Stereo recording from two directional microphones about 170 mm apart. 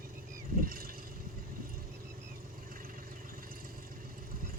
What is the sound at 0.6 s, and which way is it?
Vehicle, 60° right (ahead or behind).